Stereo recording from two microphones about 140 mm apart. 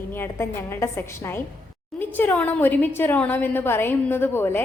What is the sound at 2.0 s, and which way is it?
A woman's voice, 15° left (ahead or behind).